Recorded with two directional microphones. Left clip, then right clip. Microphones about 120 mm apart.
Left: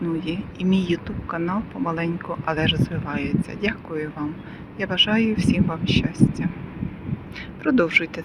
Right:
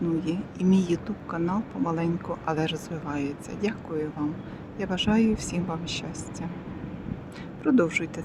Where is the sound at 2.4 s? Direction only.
20° right (ahead or behind).